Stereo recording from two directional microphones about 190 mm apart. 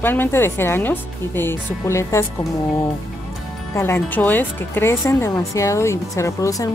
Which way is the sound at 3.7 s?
15° left (ahead or behind).